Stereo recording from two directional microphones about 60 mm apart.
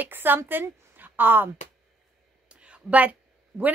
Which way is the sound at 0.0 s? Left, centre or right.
Right.